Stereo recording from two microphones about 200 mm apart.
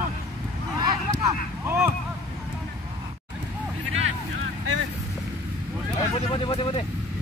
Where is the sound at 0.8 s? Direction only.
15° right (ahead or behind).